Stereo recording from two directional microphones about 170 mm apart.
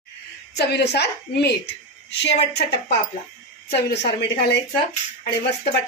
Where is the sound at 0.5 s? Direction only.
80° left.